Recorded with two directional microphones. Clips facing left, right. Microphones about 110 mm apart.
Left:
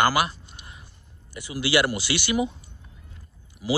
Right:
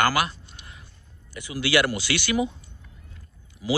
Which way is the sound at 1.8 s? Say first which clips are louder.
Even; 10° left (ahead or behind).